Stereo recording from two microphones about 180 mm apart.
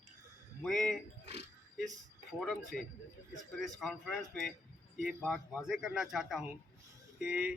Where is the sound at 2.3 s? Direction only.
Centre (ahead or behind).